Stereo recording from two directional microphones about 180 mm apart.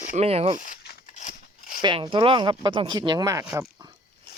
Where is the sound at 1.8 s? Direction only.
25° right (ahead or behind).